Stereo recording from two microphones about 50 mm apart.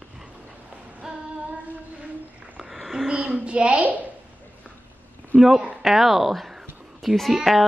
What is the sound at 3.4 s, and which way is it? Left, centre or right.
Speech, right.